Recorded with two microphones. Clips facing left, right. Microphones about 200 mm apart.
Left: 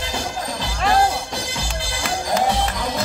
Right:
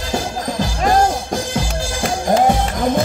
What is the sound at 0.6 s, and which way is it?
Music, 45° right (ahead or behind).